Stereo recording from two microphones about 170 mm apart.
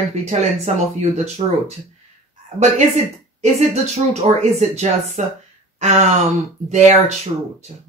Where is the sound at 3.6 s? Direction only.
40° right (ahead or behind).